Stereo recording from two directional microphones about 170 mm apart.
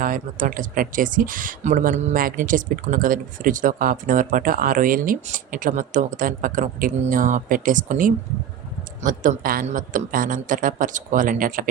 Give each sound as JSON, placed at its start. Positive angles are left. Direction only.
{"t": 0.0, "sound": "speech", "side_deg": -55}